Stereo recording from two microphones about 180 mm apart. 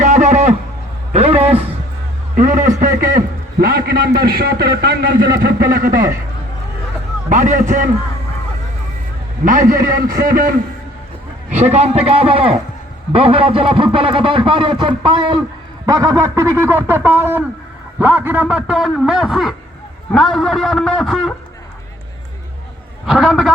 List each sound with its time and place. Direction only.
0.0 s a sound: 40° right (ahead or behind)
2.3 s a man's voice: 45° right (ahead or behind)
7.3 s a man's voice: 45° right (ahead or behind)
9.4 s a man's voice: 45° right (ahead or behind)
11.5 s a man's voice: 35° right (ahead or behind); by 21.3 s centre (ahead or behind)
23.0 s a man's voice: centre (ahead or behind)